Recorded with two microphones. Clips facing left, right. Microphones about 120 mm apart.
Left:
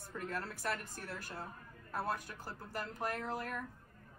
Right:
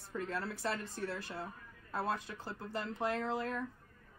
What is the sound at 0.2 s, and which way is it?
Speech, 25° right (ahead or behind).